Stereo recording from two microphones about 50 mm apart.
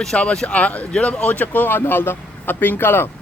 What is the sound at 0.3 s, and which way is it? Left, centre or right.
A man's voice, left.